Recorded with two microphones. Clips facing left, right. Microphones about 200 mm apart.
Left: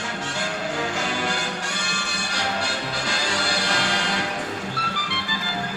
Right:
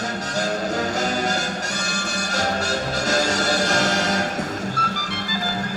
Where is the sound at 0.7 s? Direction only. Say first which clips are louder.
Right 4 dB; 40° right (ahead or behind).